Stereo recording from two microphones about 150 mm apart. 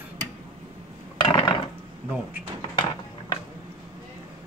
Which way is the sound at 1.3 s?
30° left (ahead or behind).